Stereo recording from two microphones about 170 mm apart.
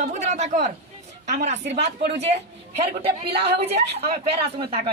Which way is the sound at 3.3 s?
35° right (ahead or behind).